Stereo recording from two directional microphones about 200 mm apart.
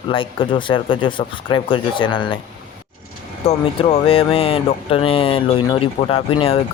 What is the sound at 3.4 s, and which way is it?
Speech, 30° left (ahead or behind).